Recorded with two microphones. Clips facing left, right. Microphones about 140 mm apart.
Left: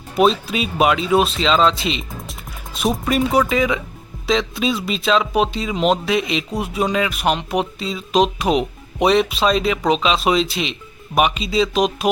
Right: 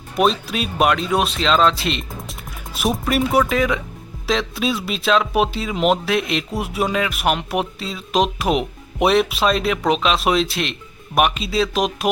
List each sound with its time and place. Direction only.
0.2 s speech: centre (ahead or behind)